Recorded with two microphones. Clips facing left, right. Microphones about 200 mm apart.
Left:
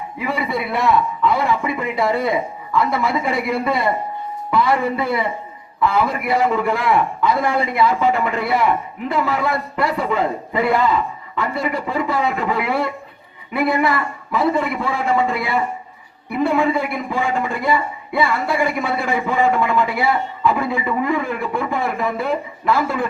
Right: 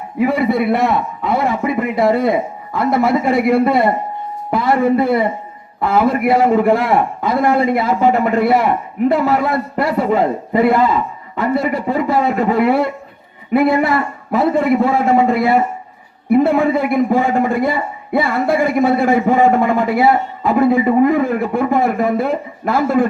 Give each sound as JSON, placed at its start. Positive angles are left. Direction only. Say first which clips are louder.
{"t": 0.2, "sound": "a man's voice", "louder": "right 8 dB", "side_deg": -50}